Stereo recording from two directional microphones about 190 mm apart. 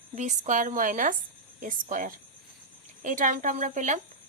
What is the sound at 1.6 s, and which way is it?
Speech, 45° right (ahead or behind).